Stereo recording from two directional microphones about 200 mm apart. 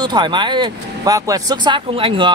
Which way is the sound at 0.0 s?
20° right (ahead or behind).